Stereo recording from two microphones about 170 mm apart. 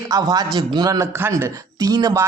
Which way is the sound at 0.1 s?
20° right (ahead or behind).